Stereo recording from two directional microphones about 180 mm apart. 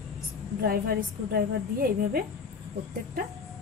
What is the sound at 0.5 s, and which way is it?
A woman's voice, 55° right (ahead or behind).